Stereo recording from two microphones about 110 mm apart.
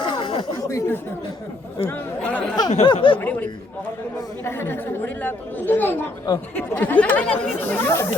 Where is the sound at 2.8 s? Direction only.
50° left (ahead or behind).